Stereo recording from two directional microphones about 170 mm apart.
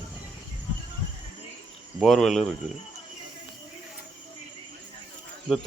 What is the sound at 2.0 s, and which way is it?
Speech, centre (ahead or behind).